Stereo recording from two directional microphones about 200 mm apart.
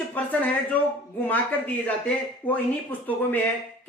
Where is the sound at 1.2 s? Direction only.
10° left (ahead or behind).